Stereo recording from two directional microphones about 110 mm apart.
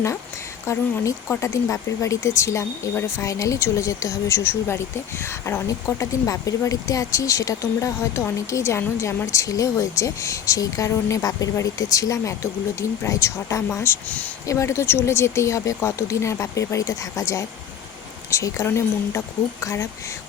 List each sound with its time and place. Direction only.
0.6 s speech: 25° left (ahead or behind)